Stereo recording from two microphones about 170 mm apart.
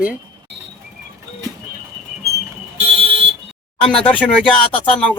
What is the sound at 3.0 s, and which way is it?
Vehicle, 35° right (ahead or behind).